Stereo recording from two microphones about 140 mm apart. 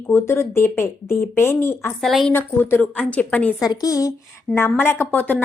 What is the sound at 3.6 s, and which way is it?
A woman's voice, 25° left (ahead or behind).